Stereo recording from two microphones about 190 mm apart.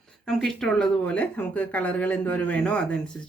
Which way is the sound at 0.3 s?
Centre (ahead or behind).